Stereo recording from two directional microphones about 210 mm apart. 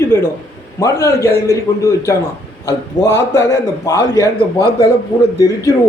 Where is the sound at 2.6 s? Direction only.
55° left (ahead or behind).